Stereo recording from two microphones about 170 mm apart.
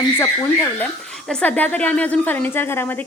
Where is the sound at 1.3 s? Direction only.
10° left (ahead or behind).